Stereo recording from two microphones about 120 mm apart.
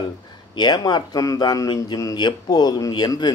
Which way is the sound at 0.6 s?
35° left (ahead or behind).